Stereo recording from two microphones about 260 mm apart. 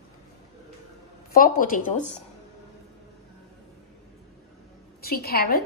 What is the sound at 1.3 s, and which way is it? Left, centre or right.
Speech, left.